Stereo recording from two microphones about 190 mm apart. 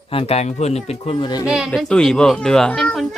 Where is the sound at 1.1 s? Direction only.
20° left (ahead or behind).